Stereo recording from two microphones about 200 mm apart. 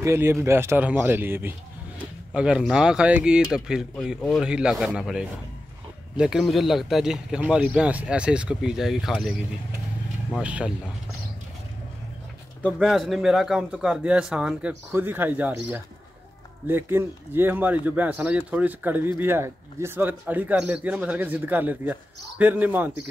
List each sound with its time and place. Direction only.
0.0 s a man's voice: 15° right (ahead or behind)
10.4 s speech: 5° right (ahead or behind)
12.6 s a man's voice: centre (ahead or behind)